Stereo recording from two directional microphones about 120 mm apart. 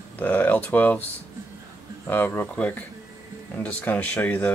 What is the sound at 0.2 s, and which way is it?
Speech, 10° left (ahead or behind).